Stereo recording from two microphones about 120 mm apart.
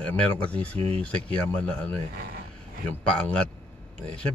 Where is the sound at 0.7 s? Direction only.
60° right (ahead or behind).